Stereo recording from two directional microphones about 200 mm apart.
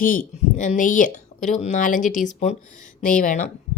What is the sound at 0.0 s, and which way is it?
Speech, 45° left (ahead or behind).